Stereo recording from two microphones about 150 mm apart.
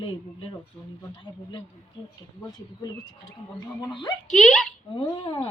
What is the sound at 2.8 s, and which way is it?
Speech, 25° left (ahead or behind).